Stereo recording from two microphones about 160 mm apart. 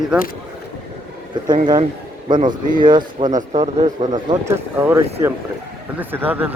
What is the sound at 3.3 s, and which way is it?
Speech, 45° right (ahead or behind).